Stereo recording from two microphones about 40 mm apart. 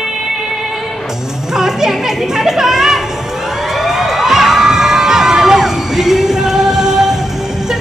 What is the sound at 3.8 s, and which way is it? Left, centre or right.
Crowd, centre.